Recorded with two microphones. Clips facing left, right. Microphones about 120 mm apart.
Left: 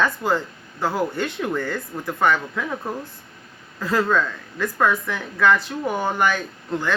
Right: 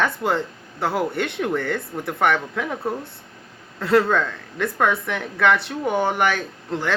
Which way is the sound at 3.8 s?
70° right (ahead or behind).